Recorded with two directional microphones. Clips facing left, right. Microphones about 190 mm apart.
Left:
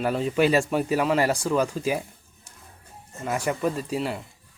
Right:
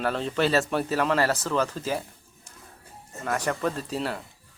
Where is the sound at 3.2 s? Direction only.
10° left (ahead or behind).